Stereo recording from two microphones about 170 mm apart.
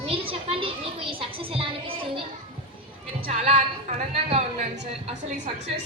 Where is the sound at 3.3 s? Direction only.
35° right (ahead or behind).